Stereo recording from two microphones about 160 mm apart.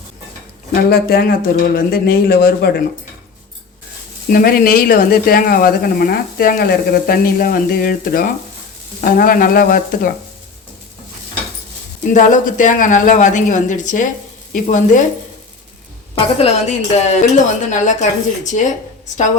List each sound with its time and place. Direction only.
0.7 s speech: 75° left (ahead or behind)
4.3 s speech: 65° left (ahead or behind)
12.1 s a woman's voice: 55° left (ahead or behind)
16.1 s a woman's voice: 40° left (ahead or behind)